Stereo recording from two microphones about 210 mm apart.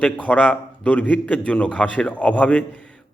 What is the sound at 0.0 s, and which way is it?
A man's voice, 5° left (ahead or behind).